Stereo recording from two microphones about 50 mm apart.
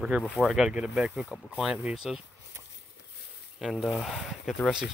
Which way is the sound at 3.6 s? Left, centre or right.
Centre.